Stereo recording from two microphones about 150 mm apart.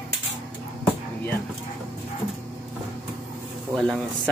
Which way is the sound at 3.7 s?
5° left (ahead or behind).